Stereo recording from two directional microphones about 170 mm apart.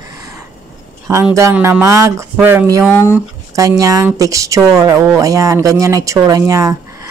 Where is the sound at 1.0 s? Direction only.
15° right (ahead or behind).